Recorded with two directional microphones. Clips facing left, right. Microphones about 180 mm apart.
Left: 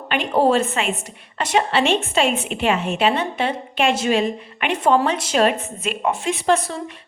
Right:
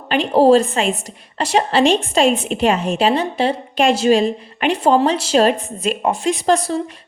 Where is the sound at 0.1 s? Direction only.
35° right (ahead or behind).